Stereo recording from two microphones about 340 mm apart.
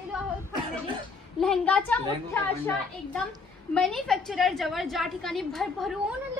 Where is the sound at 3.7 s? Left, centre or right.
Centre.